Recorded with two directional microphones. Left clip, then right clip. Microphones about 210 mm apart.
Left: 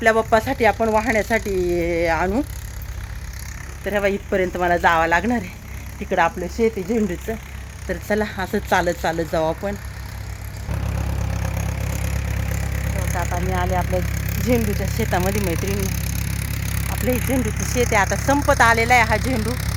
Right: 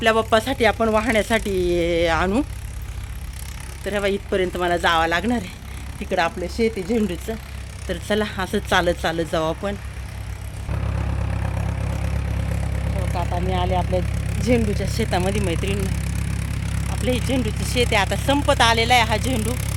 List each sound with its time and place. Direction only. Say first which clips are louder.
0.2 s speech: left 1 dB; 10° right (ahead or behind)
1.4 s speech: even; 20° right (ahead or behind)
2.0 s speech: even; centre (ahead or behind)
3.8 s speech: left 2 dB; 5° left (ahead or behind)
10.7 s vehicle: even; 55° left (ahead or behind); by 13.1 s 40° left (ahead or behind)
13.2 s speech: right 1 dB; 35° left (ahead or behind); by 17.7 s 15° left (ahead or behind)
17.7 s speech: left 1 dB; 5° left (ahead or behind)